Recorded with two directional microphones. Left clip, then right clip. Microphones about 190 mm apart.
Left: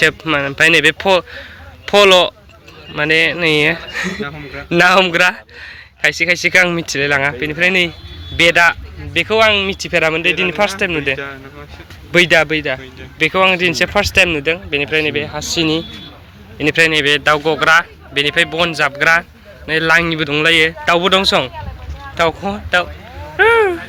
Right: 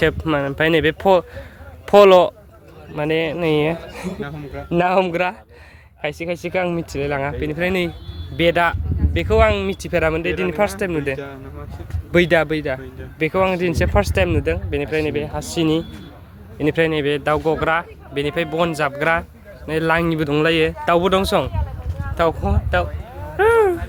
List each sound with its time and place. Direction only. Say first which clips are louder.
0.0 s speech: left 5 dB; 15° right (ahead or behind)
4.7 s speech: left 7 dB; 5° left (ahead or behind); by 20.7 s 20° right (ahead or behind)
20.8 s speech: left 4 dB; 5° right (ahead or behind)
23.4 s a sound: left 4 dB; centre (ahead or behind)